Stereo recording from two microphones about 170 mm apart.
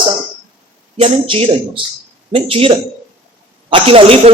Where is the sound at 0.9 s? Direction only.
30° right (ahead or behind).